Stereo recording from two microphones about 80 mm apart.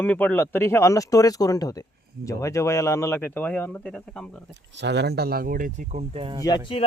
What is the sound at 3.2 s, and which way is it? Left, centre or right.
Speech, left.